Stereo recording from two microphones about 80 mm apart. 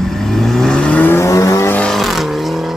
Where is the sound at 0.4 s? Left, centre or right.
Centre.